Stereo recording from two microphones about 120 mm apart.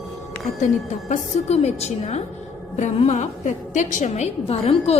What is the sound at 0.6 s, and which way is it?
A woman's voice, 75° left (ahead or behind).